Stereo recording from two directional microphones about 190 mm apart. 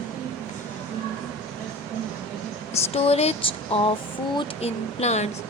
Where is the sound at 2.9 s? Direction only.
30° left (ahead or behind).